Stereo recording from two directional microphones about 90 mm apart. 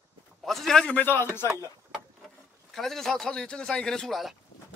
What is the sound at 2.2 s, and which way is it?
Speech, centre (ahead or behind).